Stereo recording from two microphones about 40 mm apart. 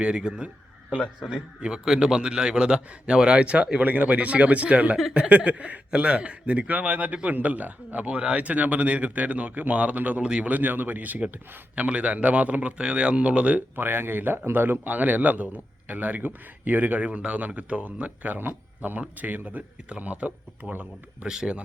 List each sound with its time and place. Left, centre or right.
0.0 s a man's voice: right
3.8 s a man's voice: right
11.7 s speech: right
13.6 s speech: right
14.8 s a man's voice: right
21.2 s a man's voice: centre